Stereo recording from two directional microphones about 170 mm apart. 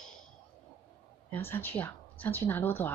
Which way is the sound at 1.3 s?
10° left (ahead or behind).